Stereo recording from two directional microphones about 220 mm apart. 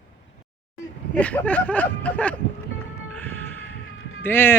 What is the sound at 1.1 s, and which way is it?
Speech, 5° left (ahead or behind).